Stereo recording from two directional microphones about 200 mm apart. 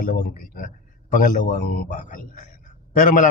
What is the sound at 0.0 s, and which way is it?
A man's voice, 45° left (ahead or behind).